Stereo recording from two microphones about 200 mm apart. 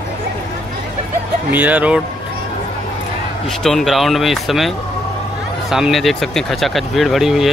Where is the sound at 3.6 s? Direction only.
Centre (ahead or behind).